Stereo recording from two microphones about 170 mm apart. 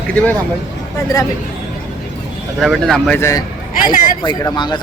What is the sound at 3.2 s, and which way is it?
Speech, 15° left (ahead or behind).